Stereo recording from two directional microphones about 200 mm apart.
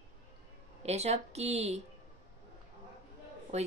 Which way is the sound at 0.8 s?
35° right (ahead or behind).